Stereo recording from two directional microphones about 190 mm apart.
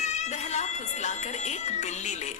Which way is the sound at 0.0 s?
35° left (ahead or behind).